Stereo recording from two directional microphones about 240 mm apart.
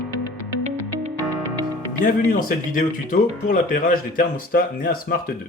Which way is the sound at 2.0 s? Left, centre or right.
Left.